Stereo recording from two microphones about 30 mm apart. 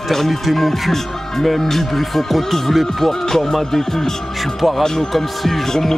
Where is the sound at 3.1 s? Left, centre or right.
Centre.